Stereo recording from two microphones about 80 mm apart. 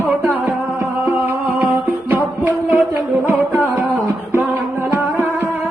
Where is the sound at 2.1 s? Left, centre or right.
Right.